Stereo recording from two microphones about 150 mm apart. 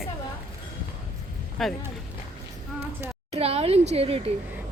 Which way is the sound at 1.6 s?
Centre (ahead or behind).